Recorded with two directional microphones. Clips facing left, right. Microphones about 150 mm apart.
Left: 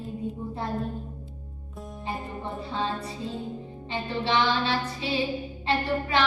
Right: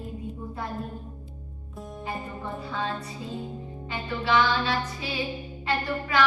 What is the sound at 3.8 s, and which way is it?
Child singing, 25° left (ahead or behind).